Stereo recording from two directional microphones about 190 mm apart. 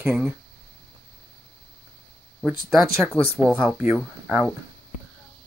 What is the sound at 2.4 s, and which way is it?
Speech, centre (ahead or behind).